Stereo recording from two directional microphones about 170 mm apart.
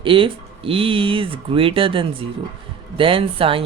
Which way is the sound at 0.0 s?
30° right (ahead or behind).